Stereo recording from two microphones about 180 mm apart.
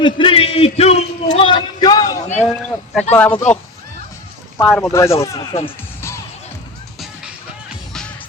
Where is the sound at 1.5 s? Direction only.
25° left (ahead or behind).